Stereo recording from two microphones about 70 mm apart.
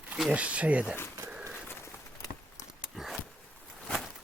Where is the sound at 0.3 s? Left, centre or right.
Centre.